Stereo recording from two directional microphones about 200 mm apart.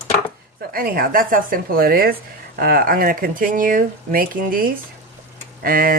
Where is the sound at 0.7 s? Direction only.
45° right (ahead or behind).